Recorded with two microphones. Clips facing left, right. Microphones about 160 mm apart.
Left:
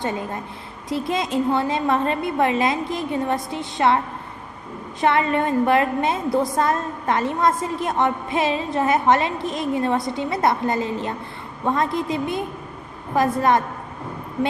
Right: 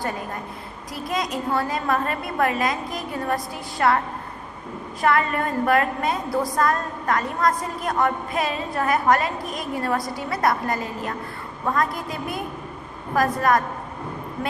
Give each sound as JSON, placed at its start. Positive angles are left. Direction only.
{"t": 0.0, "sound": "a woman's voice", "side_deg": 25}